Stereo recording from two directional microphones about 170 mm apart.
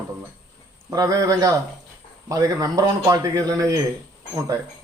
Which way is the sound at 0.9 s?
20° right (ahead or behind).